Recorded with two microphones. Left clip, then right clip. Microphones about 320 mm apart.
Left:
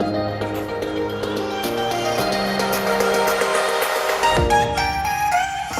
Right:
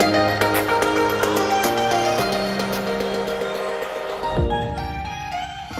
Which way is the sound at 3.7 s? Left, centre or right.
Left.